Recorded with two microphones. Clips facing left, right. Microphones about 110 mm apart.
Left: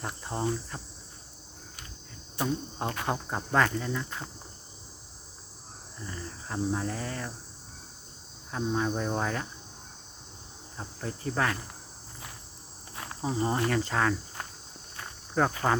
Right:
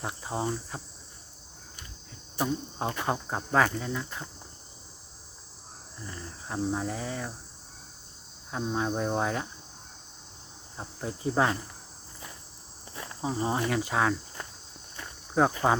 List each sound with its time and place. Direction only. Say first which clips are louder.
0.0 s cricket: right 2 dB; 5° right (ahead or behind)
0.7 s speech: right 1 dB; 10° right (ahead or behind)
2.4 s speech: right 1 dB; 5° right (ahead or behind)
6.0 s speech: left 2 dB; 5° right (ahead or behind)
8.4 s speech: left 1 dB; 5° right (ahead or behind)
10.8 s speech: right 1 dB; 15° right (ahead or behind)
13.3 s speech: left 1 dB; 5° right (ahead or behind)
15.4 s speech: right 2 dB; 10° right (ahead or behind)